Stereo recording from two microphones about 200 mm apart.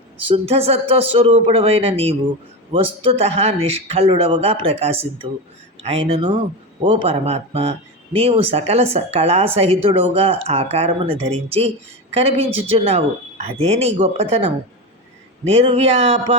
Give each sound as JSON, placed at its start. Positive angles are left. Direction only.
{"t": 0.3, "sound": "speech", "side_deg": -30}